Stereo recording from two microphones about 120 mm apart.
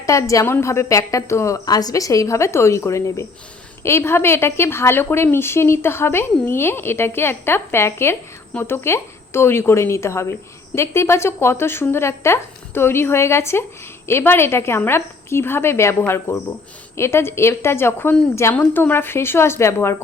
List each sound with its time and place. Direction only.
0.0 s a woman's voice: 25° left (ahead or behind)